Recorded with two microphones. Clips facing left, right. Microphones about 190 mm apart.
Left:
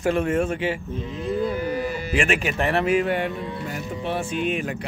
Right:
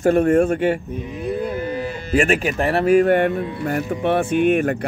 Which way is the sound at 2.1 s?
40° right (ahead or behind).